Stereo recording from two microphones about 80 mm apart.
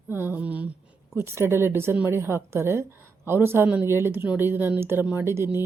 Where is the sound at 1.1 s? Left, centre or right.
Right.